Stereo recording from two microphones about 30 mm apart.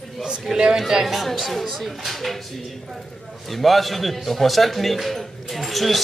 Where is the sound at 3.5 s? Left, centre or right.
Centre.